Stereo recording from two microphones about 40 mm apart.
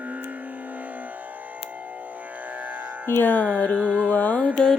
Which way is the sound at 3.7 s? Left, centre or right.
Right.